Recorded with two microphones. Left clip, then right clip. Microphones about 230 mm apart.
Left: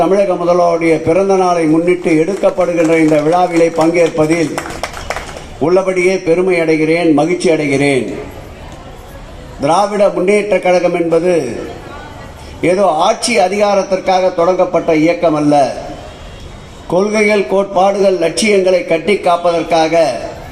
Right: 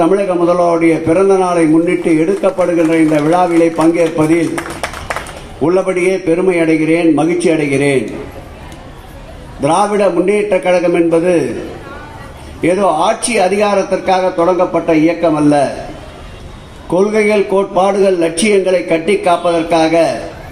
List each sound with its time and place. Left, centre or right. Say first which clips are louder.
0.0 s a man's voice: even; left
5.6 s a man's voice: left 1 dB; left
9.6 s a man's voice: left 1 dB; left
12.6 s a man's voice: left 1 dB; left
16.9 s a man's voice: even; left